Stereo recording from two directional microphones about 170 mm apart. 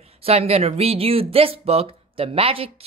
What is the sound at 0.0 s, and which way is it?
Speech, 35° right (ahead or behind).